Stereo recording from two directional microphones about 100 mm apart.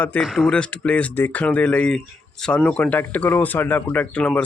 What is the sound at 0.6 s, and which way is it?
Speech, 10° left (ahead or behind).